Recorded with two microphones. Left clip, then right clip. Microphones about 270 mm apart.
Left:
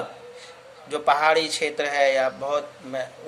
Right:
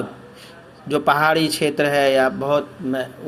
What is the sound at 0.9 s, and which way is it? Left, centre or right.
Speech, centre.